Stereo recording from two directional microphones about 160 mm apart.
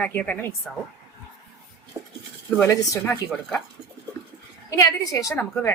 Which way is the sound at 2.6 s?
20° left (ahead or behind).